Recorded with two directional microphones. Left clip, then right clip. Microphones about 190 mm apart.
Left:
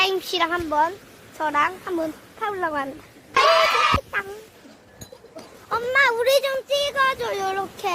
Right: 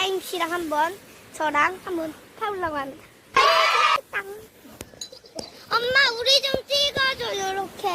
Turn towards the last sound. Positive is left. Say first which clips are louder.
# left 2 dB
turn(degrees=10)  # may be behind; listen again after turning